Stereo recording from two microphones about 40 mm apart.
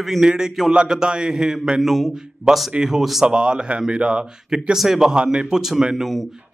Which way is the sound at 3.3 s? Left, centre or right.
Right.